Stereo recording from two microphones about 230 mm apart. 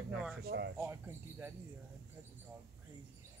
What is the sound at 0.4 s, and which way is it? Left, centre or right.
Speech, right.